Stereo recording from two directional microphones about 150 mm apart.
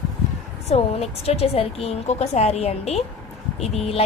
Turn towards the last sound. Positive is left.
turn(degrees=45)  # may be behind; listen again after turning